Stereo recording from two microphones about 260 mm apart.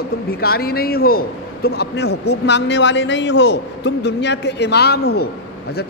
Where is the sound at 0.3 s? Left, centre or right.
Left.